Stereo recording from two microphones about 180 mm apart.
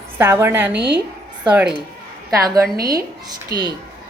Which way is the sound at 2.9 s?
20° right (ahead or behind).